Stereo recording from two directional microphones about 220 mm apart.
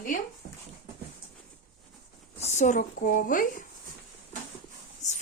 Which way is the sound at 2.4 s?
30° left (ahead or behind).